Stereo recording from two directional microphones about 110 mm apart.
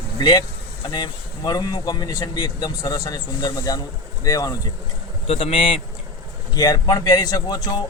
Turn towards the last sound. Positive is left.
turn(degrees=40)  # may be behind; listen again after turning